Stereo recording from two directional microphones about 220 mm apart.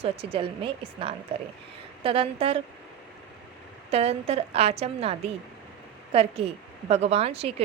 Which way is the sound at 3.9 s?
30° right (ahead or behind).